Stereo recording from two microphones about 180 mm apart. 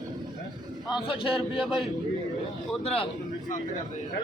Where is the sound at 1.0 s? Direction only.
30° left (ahead or behind).